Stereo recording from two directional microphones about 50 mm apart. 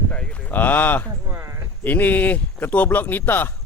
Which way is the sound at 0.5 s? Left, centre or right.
Left.